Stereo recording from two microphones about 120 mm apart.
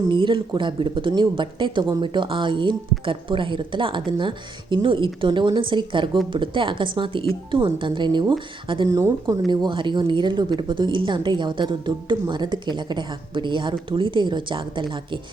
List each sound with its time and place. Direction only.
0.1 s speech: 45° right (ahead or behind)
8.9 s speech: 25° right (ahead or behind)
9.5 s speech: 40° right (ahead or behind)